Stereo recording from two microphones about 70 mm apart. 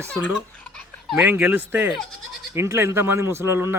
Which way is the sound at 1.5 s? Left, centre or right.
Right.